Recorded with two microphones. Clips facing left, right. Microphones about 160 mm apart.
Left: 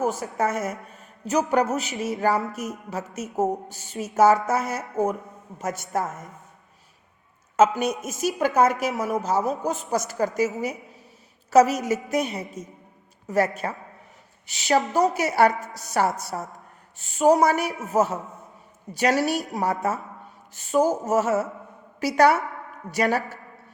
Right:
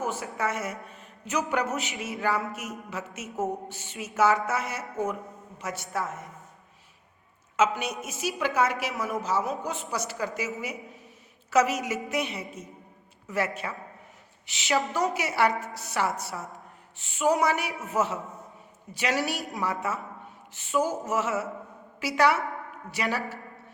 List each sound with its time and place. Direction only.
0.0 s a woman's voice: 40° left (ahead or behind)
7.5 s a woman's voice: 40° left (ahead or behind)